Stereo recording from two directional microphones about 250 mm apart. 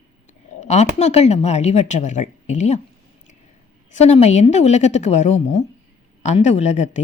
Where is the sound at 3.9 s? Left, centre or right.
Left.